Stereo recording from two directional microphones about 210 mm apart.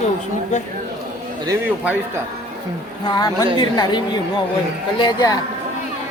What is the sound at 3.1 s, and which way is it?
Speech, 20° left (ahead or behind).